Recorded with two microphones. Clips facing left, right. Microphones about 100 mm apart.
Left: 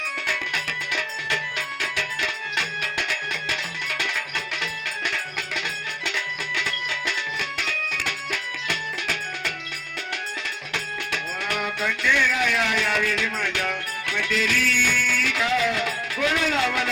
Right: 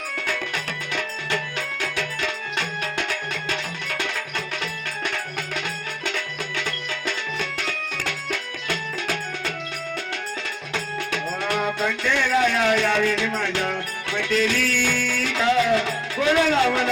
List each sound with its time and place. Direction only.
0.3 s music: 35° right (ahead or behind)
7.3 s music: 40° right (ahead or behind)
11.4 s music: 30° right (ahead or behind)
16.5 s a sound: 30° right (ahead or behind)